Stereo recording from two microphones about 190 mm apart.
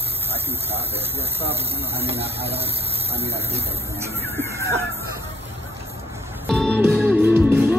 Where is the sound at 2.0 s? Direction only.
30° right (ahead or behind).